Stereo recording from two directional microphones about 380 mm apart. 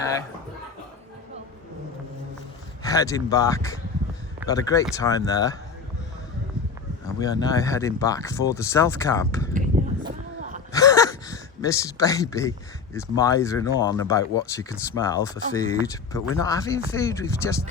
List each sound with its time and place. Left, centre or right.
2.8 s speech: centre
7.2 s speech: centre
9.5 s a sound: centre
10.7 s speech: centre